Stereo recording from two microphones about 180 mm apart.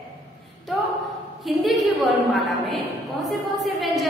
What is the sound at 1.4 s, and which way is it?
Speech, centre (ahead or behind).